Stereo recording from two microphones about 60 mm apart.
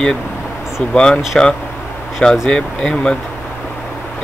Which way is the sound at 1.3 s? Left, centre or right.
Centre.